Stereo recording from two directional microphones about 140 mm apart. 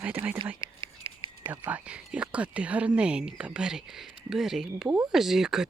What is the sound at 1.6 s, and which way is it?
Speech, 10° right (ahead or behind).